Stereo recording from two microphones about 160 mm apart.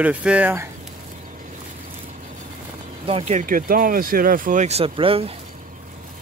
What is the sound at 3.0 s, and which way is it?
Speech, 40° right (ahead or behind).